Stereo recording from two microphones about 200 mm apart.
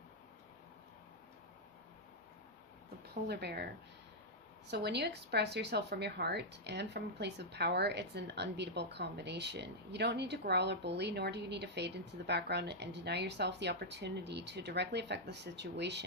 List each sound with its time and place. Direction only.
3.2 s speech: 55° right (ahead or behind)
4.7 s a woman's voice: 55° right (ahead or behind)